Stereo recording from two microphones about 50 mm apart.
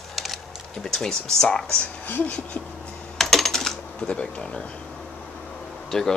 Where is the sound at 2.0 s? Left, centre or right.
Left.